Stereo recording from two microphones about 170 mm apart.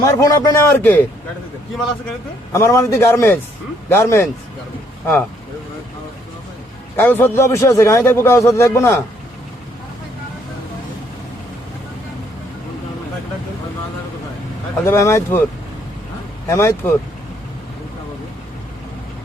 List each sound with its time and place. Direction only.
0.0 s a man's voice: 20° left (ahead or behind)
2.5 s a man's voice: 15° left (ahead or behind)
6.9 s a man's voice: 10° left (ahead or behind)
14.8 s a man's voice: 15° left (ahead or behind)
16.5 s a man's voice: 15° left (ahead or behind)